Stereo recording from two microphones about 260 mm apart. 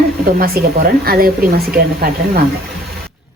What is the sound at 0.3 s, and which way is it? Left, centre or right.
Speech, right.